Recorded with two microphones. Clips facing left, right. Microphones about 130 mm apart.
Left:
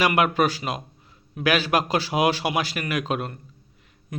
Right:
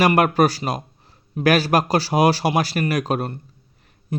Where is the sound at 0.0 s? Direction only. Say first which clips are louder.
Right 4 dB; 40° right (ahead or behind).